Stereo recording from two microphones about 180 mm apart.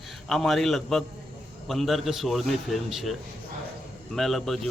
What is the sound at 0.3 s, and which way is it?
A man's voice, centre (ahead or behind).